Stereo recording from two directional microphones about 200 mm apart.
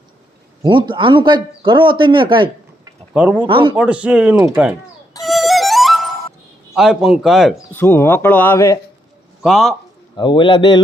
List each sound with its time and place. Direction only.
0.6 s a man's voice: 25° right (ahead or behind)
3.1 s speech: 5° right (ahead or behind)
3.4 s a man's voice: 25° right (ahead or behind)
3.8 s speech: 5° right (ahead or behind)
5.2 s music: centre (ahead or behind)
6.7 s a man's voice: centre (ahead or behind)
7.7 s speech: 10° left (ahead or behind)
9.4 s a man's voice: centre (ahead or behind)
10.2 s a man's voice: 25° left (ahead or behind)